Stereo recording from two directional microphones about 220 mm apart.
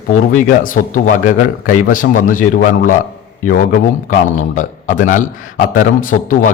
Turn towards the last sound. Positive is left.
turn(degrees=35)  # may be behind; listen again after turning